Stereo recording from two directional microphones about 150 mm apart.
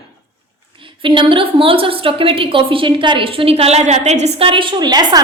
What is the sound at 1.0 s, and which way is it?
A woman's voice, 35° right (ahead or behind).